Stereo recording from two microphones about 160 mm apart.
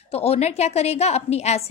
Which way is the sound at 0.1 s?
40° left (ahead or behind).